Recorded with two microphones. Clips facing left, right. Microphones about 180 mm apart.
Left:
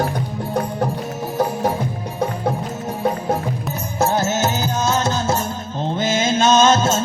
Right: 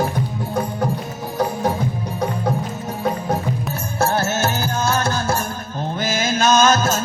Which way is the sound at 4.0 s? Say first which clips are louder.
Left 1 dB; 20° left (ahead or behind).